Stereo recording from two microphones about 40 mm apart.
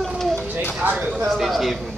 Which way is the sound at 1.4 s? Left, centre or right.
Centre.